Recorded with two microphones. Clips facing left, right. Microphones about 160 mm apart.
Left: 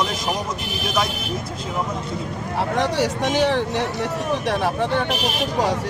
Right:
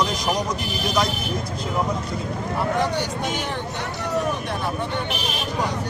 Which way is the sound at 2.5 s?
90° left.